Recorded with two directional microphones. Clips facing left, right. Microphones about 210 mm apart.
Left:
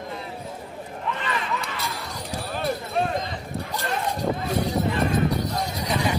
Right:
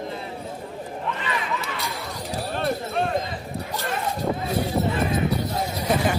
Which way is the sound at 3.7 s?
Centre (ahead or behind).